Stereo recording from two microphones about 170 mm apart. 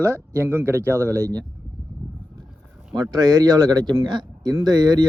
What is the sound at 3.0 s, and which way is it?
Speech, 25° right (ahead or behind).